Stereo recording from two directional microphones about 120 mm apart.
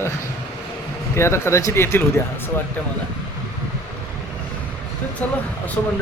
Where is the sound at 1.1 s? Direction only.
20° left (ahead or behind).